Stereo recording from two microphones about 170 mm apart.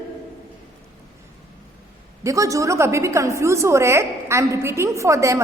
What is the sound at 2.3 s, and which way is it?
A woman's voice, 20° right (ahead or behind).